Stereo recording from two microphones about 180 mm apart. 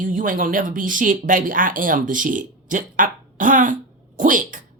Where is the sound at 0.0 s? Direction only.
45° right (ahead or behind).